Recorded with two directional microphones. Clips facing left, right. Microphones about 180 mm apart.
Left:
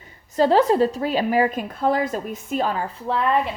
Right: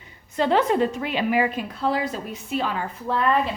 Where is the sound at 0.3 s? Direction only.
35° left (ahead or behind).